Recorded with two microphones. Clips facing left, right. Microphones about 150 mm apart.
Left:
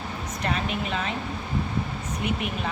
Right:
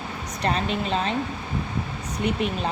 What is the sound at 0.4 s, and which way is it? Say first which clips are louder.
Speech: right 4 dB; 30° right (ahead or behind).